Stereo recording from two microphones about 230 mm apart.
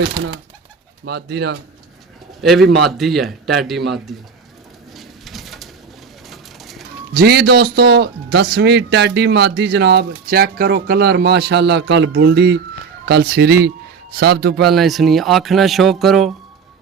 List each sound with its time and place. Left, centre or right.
1.0 s a man's voice: right
2.4 s a man's voice: centre
4.9 s bird: centre
7.1 s a man's voice: right
14.7 s a man's voice: centre